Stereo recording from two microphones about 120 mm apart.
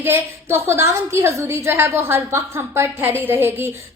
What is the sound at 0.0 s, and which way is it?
A woman's voice, 20° right (ahead or behind).